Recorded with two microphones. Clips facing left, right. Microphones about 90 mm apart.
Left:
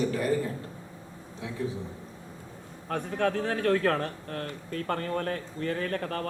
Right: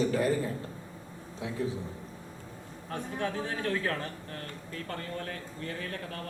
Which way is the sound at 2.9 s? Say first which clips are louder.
Left 6 dB; 60° left (ahead or behind).